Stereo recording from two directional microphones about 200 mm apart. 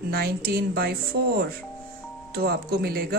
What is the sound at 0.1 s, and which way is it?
Speech, 50° right (ahead or behind).